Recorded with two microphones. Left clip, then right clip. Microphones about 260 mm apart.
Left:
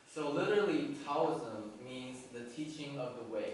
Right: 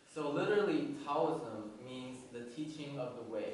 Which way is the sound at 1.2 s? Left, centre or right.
Centre.